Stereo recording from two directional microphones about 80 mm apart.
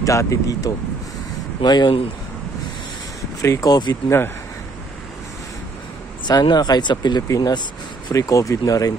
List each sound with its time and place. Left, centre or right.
0.0 s speech: left
1.6 s speech: left
3.3 s speech: left
3.6 s speech: left
6.2 s speech: left
7.2 s speech: left
8.1 s speech: left